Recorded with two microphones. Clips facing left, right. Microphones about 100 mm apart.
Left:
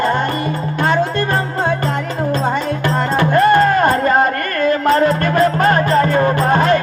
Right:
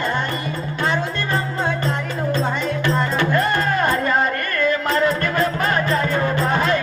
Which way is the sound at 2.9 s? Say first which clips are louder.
Left 8 dB; 50° left (ahead or behind).